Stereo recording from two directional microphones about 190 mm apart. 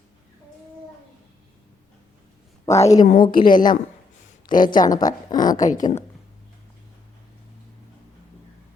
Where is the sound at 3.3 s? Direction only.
45° left (ahead or behind).